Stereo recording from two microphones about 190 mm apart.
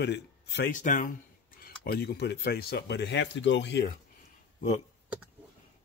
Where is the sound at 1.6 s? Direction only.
55° left (ahead or behind).